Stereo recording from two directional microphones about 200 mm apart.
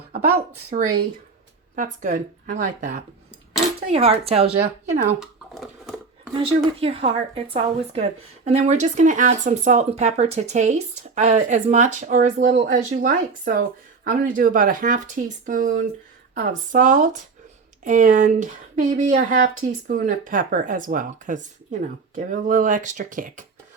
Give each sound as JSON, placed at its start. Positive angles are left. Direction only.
{"t": 0.8, "sound": "speech", "side_deg": -90}
{"t": 1.7, "sound": "speech", "side_deg": -40}
{"t": 3.9, "sound": "speech", "side_deg": -30}
{"t": 5.2, "sound": "a sound", "side_deg": 0}
{"t": 6.3, "sound": "speech", "side_deg": -25}